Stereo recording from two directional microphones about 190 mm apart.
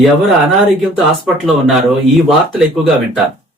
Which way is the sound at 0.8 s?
Centre (ahead or behind).